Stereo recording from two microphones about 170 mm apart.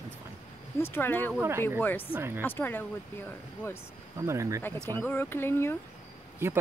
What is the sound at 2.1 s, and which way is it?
Speech, 10° right (ahead or behind).